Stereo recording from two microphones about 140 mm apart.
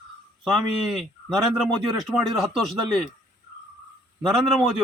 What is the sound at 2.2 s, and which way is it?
Speech, centre (ahead or behind).